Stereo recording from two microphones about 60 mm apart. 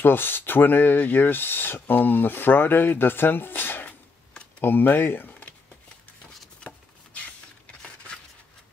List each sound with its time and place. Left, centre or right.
0.0 s speech: left